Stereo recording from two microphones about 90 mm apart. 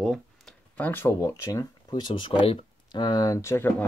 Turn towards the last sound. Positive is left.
turn(degrees=30)  # may be behind; listen again after turning